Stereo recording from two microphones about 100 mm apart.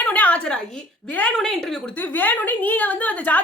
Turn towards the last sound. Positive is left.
turn(degrees=15)  # may be behind; listen again after turning